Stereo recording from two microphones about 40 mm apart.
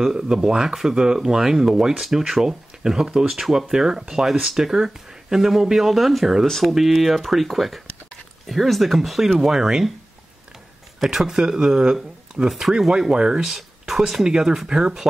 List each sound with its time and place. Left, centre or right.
0.0 s speech: centre
9.4 s speech: centre
11.1 s speech: centre